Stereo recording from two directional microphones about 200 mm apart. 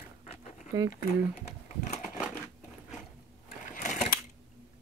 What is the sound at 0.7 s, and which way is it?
Speech, 20° right (ahead or behind).